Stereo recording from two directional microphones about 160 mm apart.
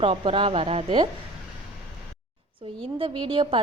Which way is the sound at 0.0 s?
35° right (ahead or behind).